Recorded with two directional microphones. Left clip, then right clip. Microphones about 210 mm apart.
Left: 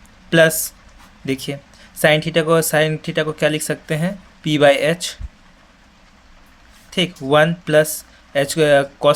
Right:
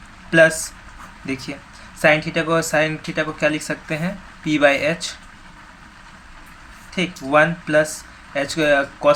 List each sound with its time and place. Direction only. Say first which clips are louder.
0.3 s speech: even; 55° left (ahead or behind)
2.0 s speech: left 1 dB; 55° left (ahead or behind)
6.9 s speech: left 2 dB; 55° left (ahead or behind)